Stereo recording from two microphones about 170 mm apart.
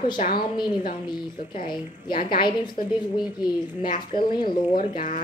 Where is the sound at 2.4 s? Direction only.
25° left (ahead or behind).